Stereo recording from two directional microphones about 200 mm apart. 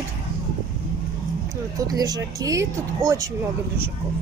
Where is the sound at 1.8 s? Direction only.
20° right (ahead or behind).